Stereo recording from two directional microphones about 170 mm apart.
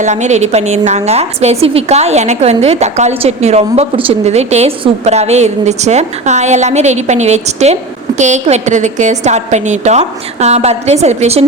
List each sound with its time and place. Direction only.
0.0 s a woman's voice: 45° right (ahead or behind)